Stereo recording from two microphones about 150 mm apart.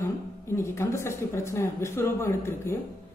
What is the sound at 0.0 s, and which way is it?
Speech, 20° left (ahead or behind).